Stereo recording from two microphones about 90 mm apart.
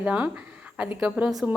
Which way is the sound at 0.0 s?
15° right (ahead or behind).